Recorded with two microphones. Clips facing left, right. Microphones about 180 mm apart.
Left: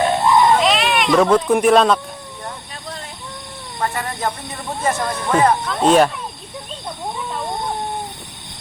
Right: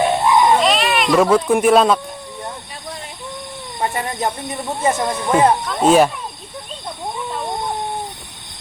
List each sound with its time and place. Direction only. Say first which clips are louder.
0.0 s baby cry: even; 10° right (ahead or behind)
0.6 s speech: even; centre (ahead or behind)
3.8 s speech: right 2 dB; 20° right (ahead or behind)
5.1 s speech: even; 10° right (ahead or behind)